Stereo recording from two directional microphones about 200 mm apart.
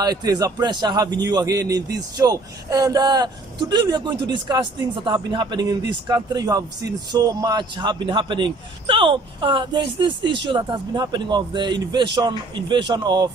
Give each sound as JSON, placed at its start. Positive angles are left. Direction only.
{"t": 0.0, "sound": "a man's voice", "side_deg": -20}